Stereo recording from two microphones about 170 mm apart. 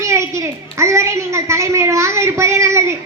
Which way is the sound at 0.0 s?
15° right (ahead or behind).